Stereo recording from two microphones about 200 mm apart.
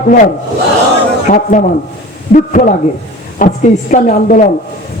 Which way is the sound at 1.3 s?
40° left (ahead or behind).